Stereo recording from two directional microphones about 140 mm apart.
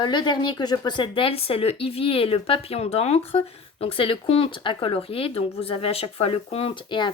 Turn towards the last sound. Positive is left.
turn(degrees=35)  # may be behind; listen again after turning